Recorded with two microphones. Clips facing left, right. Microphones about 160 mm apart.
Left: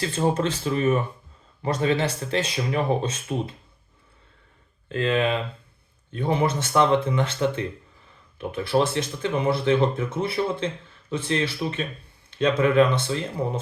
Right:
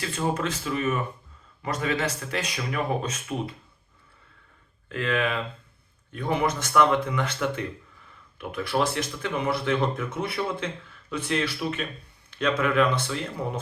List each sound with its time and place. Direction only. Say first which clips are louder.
0.0 s speech: left 4 dB; 30° left (ahead or behind)
4.9 s speech: left 4 dB; 25° left (ahead or behind)